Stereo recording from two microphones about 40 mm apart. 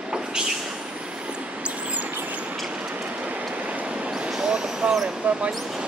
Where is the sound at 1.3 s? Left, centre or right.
Right.